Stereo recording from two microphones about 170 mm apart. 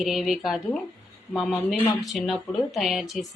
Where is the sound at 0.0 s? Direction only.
Centre (ahead or behind).